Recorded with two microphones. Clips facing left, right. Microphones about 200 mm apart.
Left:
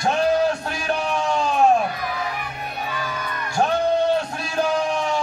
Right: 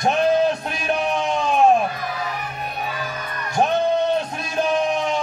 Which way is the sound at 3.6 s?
20° right (ahead or behind).